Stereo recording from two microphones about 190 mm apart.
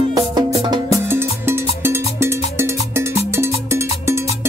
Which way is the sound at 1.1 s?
10° right (ahead or behind).